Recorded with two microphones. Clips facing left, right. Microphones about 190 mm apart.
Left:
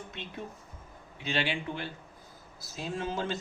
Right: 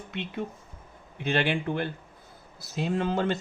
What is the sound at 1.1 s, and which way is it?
Speech, 55° right (ahead or behind).